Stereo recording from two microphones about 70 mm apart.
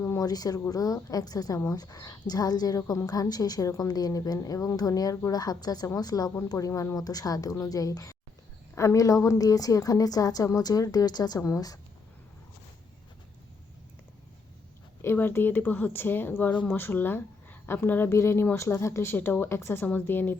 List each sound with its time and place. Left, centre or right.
0.2 s a woman's voice: left
6.5 s a woman's voice: left
11.3 s a woman's voice: left
15.0 s a woman's voice: left
19.1 s speech: left